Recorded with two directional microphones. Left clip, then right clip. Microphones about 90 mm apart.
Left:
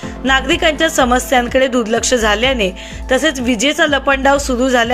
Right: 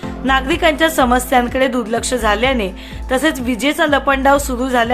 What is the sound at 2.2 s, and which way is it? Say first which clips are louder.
A woman's voice: left 2 dB; 35° left (ahead or behind).